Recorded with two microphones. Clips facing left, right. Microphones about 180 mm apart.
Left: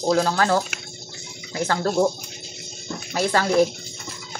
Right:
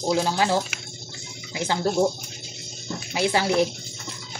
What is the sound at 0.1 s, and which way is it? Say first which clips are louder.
Speech: left 2 dB; 15° right (ahead or behind).